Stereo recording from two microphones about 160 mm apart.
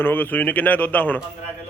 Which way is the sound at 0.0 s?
10° left (ahead or behind).